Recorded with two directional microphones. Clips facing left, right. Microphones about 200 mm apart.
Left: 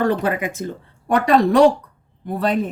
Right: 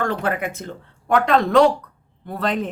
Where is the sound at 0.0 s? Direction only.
15° left (ahead or behind).